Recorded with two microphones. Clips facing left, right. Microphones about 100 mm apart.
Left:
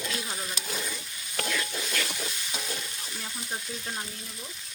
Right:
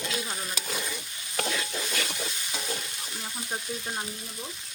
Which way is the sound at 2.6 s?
5° right (ahead or behind).